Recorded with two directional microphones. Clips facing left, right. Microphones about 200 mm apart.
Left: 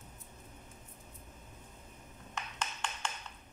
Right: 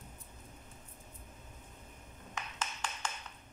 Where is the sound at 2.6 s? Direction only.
5° right (ahead or behind).